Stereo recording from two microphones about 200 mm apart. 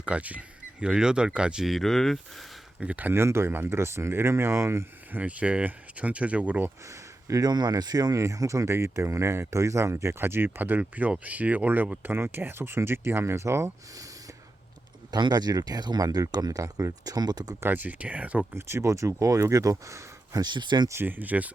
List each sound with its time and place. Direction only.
0.0 s speech: 5° right (ahead or behind)
15.1 s speech: 20° right (ahead or behind)